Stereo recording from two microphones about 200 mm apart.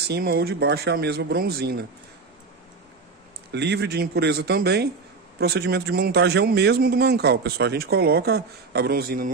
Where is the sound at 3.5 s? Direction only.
55° right (ahead or behind).